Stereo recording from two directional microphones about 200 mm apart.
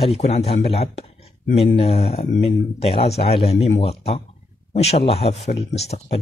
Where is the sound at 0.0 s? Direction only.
30° left (ahead or behind).